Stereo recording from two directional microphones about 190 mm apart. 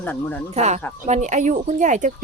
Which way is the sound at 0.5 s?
35° right (ahead or behind).